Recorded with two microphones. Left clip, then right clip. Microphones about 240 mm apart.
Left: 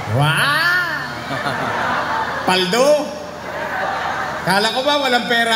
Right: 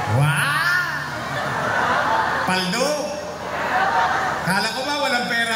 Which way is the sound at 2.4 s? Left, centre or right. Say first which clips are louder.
Left 6 dB; left.